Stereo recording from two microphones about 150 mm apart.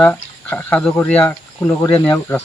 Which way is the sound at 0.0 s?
10° left (ahead or behind).